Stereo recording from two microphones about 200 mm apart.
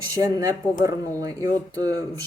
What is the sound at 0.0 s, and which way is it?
Speech, 15° right (ahead or behind).